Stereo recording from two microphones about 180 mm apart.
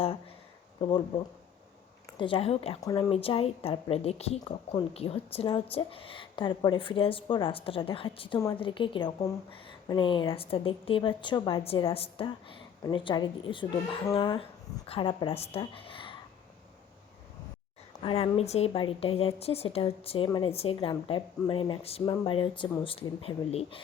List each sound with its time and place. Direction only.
0.8 s a woman's voice: 30° left (ahead or behind)
2.1 s speech: 30° left (ahead or behind)
2.8 s a woman's voice: 20° left (ahead or behind)
3.1 s a woman's voice: 30° left (ahead or behind)
18.0 s speech: 30° left (ahead or behind)